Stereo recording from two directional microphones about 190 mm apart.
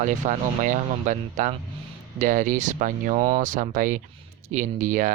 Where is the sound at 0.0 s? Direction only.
40° right (ahead or behind).